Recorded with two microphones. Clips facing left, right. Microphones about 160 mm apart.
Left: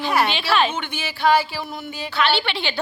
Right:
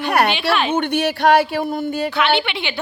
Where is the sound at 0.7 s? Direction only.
60° right (ahead or behind).